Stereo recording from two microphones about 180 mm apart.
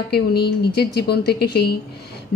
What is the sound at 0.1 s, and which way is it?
A woman's voice, 65° left (ahead or behind).